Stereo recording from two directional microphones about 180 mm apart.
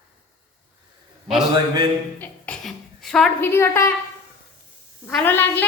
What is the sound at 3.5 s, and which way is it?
Speech, 15° left (ahead or behind).